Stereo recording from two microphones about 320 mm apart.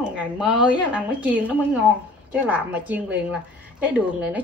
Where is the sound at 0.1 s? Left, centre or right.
Centre.